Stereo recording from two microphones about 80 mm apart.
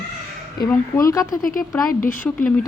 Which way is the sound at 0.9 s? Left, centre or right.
Left.